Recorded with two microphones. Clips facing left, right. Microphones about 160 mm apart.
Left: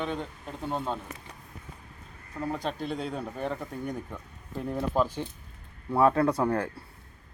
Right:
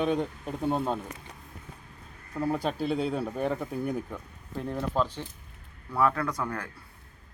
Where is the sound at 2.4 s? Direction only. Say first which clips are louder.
Right 3 dB; 5° right (ahead or behind).